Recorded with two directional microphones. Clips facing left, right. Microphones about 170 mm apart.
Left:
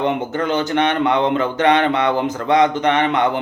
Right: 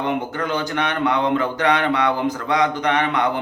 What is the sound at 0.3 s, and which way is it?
Speech, 25° left (ahead or behind).